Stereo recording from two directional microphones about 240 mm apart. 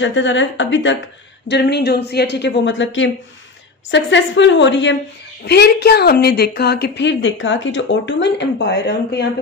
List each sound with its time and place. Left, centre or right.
0.0 s a woman's voice: left